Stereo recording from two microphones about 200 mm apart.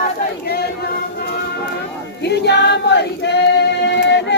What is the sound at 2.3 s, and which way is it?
Choir, 55° left (ahead or behind).